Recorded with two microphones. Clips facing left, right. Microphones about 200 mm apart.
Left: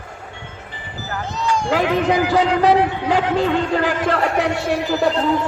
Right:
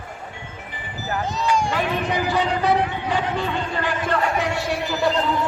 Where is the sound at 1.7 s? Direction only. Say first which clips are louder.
Left 6 dB; 90° left.